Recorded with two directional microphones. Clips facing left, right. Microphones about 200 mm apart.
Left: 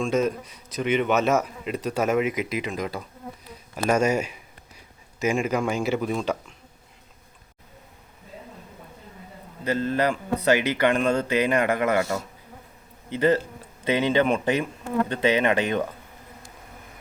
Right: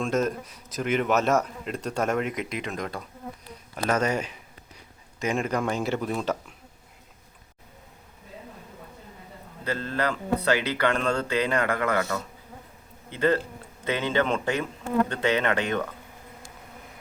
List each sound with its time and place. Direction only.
0.0 s speech: centre (ahead or behind)
9.6 s speech: 15° left (ahead or behind)
13.1 s speech: 15° left (ahead or behind)